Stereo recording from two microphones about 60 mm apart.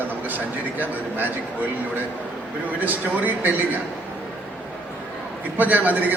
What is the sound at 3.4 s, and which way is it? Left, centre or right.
Speech, right.